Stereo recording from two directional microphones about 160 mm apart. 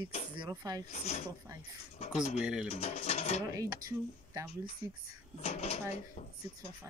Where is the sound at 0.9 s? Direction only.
45° left (ahead or behind).